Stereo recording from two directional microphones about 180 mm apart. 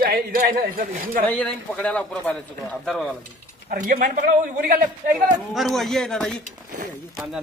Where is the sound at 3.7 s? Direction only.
50° right (ahead or behind).